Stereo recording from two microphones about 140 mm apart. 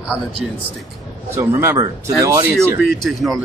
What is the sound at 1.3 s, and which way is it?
Speech, 15° right (ahead or behind).